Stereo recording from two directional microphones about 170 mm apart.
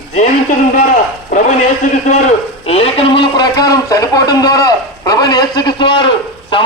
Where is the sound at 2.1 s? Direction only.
45° left (ahead or behind); by 5.9 s 25° left (ahead or behind).